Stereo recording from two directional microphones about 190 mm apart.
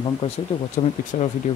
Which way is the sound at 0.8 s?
40° left (ahead or behind).